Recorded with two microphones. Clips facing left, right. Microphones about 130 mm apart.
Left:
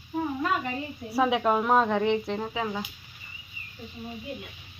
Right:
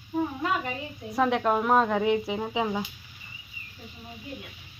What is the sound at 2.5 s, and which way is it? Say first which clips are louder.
Speech: right 3 dB; 20° right (ahead or behind).